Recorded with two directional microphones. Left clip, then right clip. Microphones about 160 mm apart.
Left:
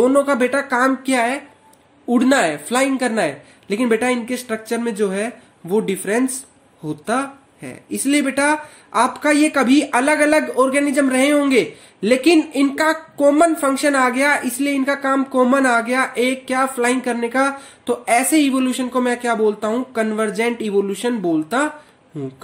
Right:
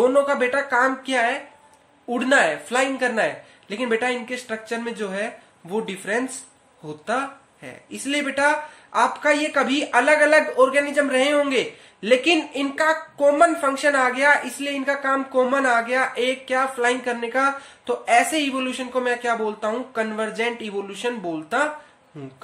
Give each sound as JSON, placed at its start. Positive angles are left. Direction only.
{"t": 0.0, "sound": "speech", "side_deg": 40}